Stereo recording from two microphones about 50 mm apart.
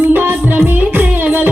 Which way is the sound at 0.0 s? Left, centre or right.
Right.